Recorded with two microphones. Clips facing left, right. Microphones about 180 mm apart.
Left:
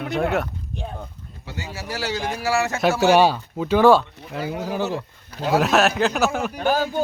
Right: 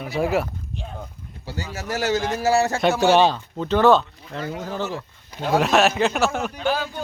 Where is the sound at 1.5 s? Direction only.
35° right (ahead or behind).